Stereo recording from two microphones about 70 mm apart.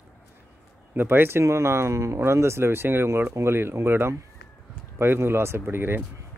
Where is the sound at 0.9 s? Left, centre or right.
Right.